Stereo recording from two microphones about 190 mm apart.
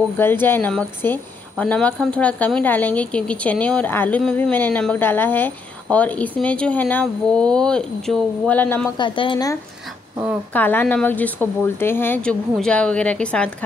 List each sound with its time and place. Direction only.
0.2 s a woman's voice: 10° left (ahead or behind)
8.9 s speech: 25° left (ahead or behind)
10.5 s a woman's voice: 10° left (ahead or behind)